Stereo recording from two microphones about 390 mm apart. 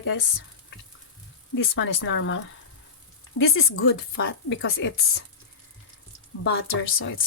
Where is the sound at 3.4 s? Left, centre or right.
Left.